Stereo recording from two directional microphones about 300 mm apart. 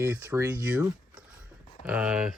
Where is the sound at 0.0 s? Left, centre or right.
Centre.